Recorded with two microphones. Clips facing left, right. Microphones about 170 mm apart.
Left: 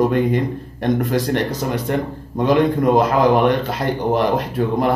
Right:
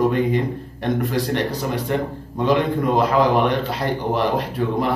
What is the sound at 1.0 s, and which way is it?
Speech, 45° left (ahead or behind).